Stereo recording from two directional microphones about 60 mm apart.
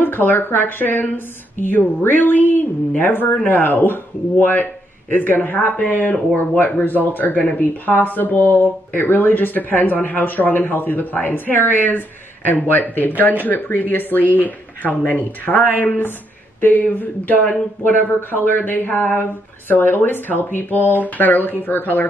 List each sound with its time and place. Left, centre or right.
0.0 s speech: left